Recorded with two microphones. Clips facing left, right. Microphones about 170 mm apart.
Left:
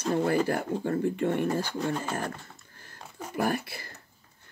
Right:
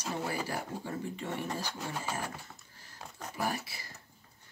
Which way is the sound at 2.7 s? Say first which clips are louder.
Left 4 dB; 55° left (ahead or behind).